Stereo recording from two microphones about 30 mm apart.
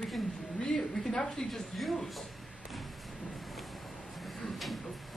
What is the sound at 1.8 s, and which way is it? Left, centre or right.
Speech, centre.